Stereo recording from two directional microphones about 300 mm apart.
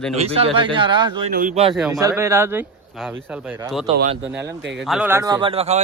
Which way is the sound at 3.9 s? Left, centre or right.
Centre.